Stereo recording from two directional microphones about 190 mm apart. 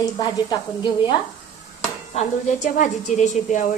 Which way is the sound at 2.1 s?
40° left (ahead or behind).